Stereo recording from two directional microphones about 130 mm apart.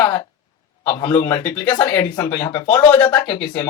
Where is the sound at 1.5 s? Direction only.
10° left (ahead or behind).